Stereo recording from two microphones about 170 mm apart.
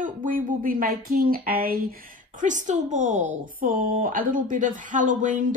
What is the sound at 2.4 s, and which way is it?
A woman's voice, 45° right (ahead or behind).